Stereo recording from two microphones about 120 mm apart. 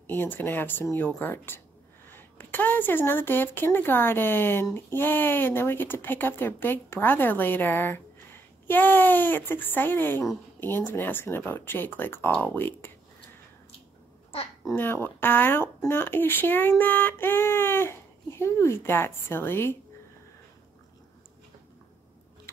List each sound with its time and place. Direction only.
0.0 s speech: 15° left (ahead or behind)
14.6 s speech: 25° left (ahead or behind)